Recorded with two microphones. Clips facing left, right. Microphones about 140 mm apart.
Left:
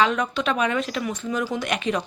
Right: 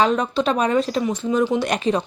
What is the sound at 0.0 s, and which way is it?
Speech, 35° right (ahead or behind).